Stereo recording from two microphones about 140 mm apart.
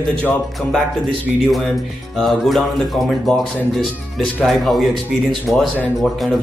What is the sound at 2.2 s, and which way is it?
Speech, centre (ahead or behind).